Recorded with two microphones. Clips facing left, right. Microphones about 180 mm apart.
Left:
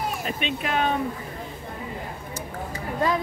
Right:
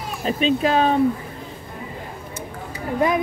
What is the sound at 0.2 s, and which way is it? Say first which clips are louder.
Speech: right 9 dB; 35° right (ahead or behind).